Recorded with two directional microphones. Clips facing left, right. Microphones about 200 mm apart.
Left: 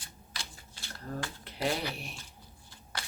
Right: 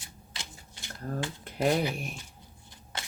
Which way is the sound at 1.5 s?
50° right (ahead or behind).